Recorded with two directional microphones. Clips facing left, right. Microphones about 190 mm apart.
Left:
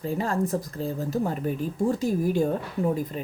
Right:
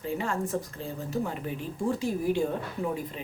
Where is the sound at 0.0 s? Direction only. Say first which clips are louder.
Left 4 dB; 35° left (ahead or behind).